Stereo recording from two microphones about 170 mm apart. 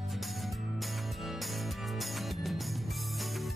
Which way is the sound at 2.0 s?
Centre (ahead or behind).